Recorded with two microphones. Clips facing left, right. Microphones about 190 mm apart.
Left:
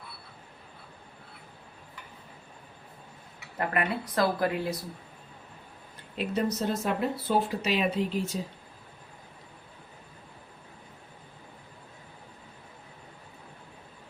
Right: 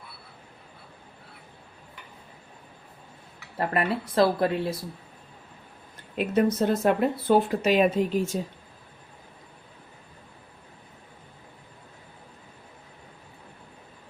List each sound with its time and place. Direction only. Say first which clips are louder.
3.6 s speech: right 3 dB; 30° right (ahead or behind)
6.1 s speech: right 6 dB; 55° right (ahead or behind)